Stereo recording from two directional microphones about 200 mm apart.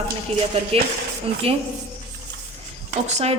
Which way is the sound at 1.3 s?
30° right (ahead or behind).